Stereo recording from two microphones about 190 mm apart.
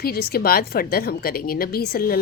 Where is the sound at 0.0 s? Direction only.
55° left (ahead or behind).